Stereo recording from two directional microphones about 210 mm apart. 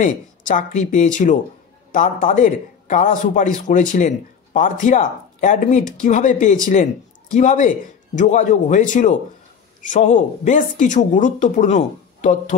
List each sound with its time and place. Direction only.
0.0 s speech: 40° left (ahead or behind)